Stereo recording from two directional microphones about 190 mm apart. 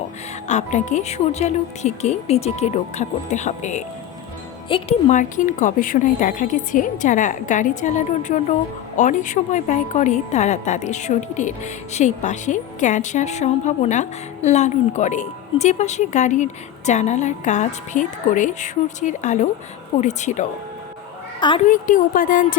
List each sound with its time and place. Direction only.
0.4 s a woman's voice: 40° left (ahead or behind)
21.7 s a woman's voice: 45° left (ahead or behind)